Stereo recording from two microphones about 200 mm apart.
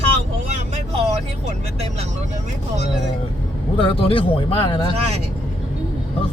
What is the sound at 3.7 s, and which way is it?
Speech, 25° left (ahead or behind).